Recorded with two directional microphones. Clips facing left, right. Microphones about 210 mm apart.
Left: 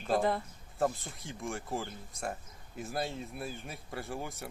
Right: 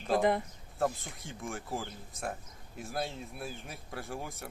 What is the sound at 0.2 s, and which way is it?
Speech, 15° right (ahead or behind).